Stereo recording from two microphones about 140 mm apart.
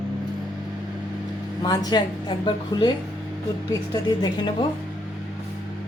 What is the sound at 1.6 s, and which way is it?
A woman's voice, 30° left (ahead or behind).